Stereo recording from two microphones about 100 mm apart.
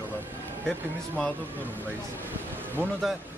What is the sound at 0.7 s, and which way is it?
A man's voice, 15° left (ahead or behind).